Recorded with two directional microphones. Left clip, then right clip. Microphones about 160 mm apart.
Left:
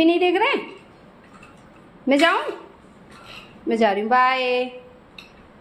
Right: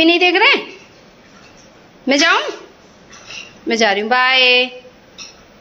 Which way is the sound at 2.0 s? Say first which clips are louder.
Right 4 dB; 5° left (ahead or behind).